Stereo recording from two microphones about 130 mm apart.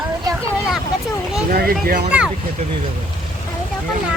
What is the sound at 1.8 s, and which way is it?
Speech, 90° right.